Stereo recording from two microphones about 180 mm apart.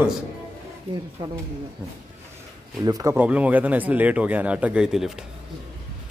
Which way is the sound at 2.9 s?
20° right (ahead or behind).